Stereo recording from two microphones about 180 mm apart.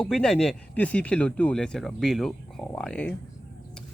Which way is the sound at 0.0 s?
5° left (ahead or behind).